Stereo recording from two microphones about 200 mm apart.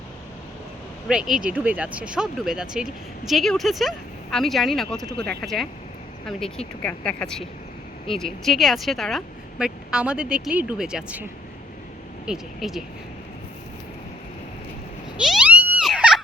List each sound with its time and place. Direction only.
1.0 s speech: centre (ahead or behind)
6.8 s speech: 5° left (ahead or behind)
15.2 s a sound: 5° right (ahead or behind)